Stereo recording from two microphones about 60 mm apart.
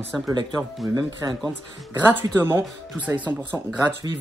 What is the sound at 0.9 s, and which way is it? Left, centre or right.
Speech, right.